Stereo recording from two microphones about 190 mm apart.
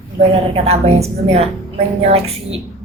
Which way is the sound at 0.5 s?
35° right (ahead or behind).